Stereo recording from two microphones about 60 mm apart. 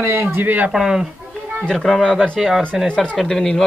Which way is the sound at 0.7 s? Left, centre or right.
Centre.